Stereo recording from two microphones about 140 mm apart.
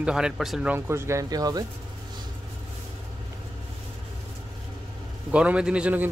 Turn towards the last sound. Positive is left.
turn(degrees=-10)  # may be behind; listen again after turning